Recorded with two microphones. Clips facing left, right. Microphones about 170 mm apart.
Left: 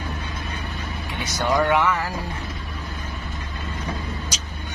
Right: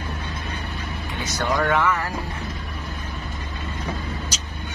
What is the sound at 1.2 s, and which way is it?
Speech, 15° left (ahead or behind).